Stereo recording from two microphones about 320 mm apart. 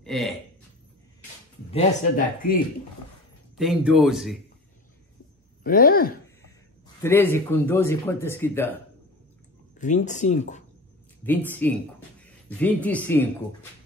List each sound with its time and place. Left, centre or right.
0.0 s speech: centre
1.7 s speech: left
3.5 s speech: centre
5.6 s speech: left
7.0 s speech: centre
9.8 s speech: left
11.2 s speech: centre